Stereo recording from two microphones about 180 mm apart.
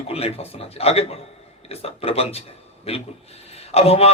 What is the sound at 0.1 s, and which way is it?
A man's voice, 35° left (ahead or behind).